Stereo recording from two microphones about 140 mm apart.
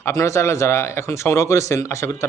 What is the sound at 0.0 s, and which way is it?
Speech, 20° left (ahead or behind).